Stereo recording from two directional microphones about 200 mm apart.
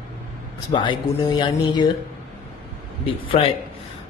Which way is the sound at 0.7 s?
25° left (ahead or behind).